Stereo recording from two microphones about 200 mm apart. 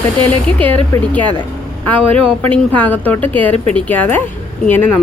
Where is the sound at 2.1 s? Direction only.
30° right (ahead or behind).